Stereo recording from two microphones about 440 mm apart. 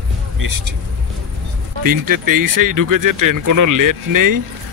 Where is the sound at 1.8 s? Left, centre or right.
Right.